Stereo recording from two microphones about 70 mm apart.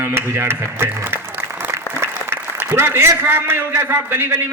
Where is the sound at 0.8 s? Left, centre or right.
Right.